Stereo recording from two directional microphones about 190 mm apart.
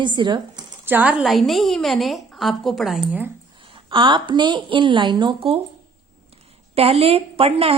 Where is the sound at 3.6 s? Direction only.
25° right (ahead or behind).